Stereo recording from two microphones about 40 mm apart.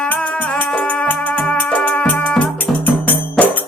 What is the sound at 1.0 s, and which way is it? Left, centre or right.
Music, left.